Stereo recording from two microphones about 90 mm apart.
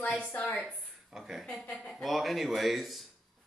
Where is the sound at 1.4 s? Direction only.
10° left (ahead or behind).